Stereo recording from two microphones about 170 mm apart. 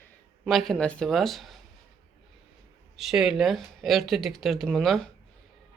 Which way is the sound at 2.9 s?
Centre (ahead or behind).